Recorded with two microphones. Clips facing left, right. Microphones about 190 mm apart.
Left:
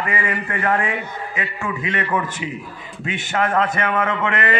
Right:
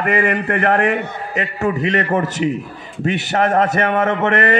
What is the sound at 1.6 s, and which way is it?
A man's voice, 40° right (ahead or behind).